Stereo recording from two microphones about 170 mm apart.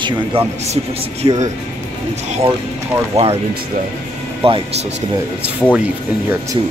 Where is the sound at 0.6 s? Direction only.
40° right (ahead or behind).